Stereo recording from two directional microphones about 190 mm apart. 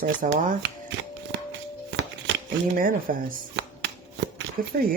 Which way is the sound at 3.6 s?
65° right (ahead or behind).